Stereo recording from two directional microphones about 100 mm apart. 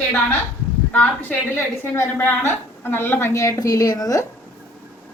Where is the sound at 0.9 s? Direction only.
15° left (ahead or behind); by 4.2 s 40° left (ahead or behind).